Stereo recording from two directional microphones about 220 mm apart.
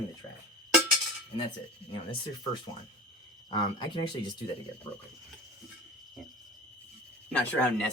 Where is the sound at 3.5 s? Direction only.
20° left (ahead or behind).